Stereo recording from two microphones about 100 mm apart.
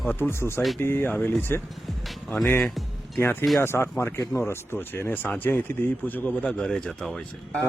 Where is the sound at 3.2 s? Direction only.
20° left (ahead or behind); by 7.2 s 5° left (ahead or behind).